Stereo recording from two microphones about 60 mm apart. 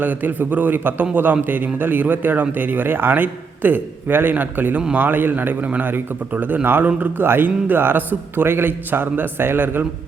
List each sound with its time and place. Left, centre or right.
0.0 s a man's voice: right